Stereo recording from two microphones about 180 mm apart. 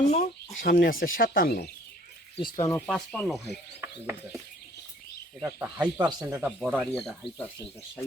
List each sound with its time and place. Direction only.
0.1 s speech: 40° left (ahead or behind); by 1.7 s 60° left (ahead or behind)
2.6 s speech: 15° left (ahead or behind); by 3.5 s centre (ahead or behind)
3.8 s speech: 15° right (ahead or behind)
5.4 s speech: 15° right (ahead or behind)
6.2 s speech: 10° right (ahead or behind)